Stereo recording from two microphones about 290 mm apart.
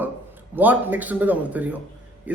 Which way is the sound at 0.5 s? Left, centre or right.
Centre.